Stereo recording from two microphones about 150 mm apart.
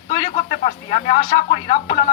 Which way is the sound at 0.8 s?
40° left (ahead or behind).